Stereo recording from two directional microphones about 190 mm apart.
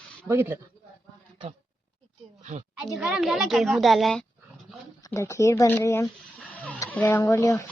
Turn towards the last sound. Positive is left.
turn(degrees=15)  # may be behind; listen again after turning